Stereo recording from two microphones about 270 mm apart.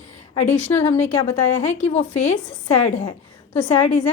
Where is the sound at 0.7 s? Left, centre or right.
Left.